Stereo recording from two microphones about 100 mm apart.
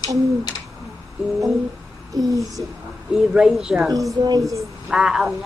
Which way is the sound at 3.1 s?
5° right (ahead or behind).